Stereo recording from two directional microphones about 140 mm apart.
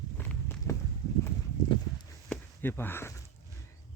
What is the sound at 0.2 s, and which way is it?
Walk, 15° left (ahead or behind).